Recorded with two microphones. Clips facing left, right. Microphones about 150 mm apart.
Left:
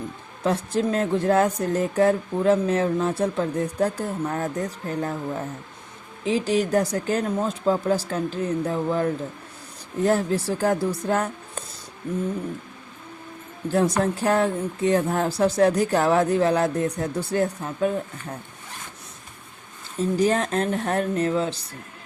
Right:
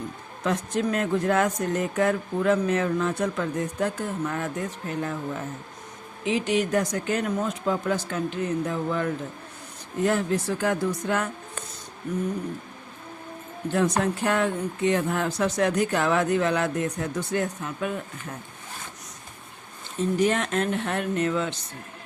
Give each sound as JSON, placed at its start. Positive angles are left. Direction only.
{"t": 0.4, "sound": "speech", "side_deg": 30}
{"t": 6.2, "sound": "speech", "side_deg": 35}
{"t": 13.7, "sound": "speech", "side_deg": 35}
{"t": 20.1, "sound": "speech", "side_deg": 35}